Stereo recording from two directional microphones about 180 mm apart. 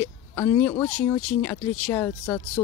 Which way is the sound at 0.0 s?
10° left (ahead or behind).